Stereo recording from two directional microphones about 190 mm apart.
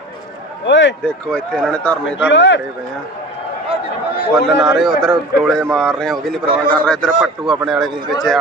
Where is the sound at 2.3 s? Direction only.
70° left (ahead or behind).